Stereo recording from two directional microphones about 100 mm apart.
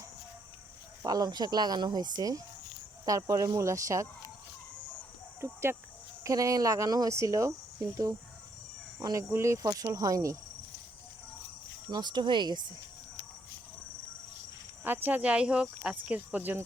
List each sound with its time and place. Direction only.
1.0 s speech: 40° right (ahead or behind)
5.4 s cricket: 25° right (ahead or behind)
6.2 s speech: 35° right (ahead or behind)
11.9 s speech: 45° right (ahead or behind)
14.8 s speech: 20° right (ahead or behind)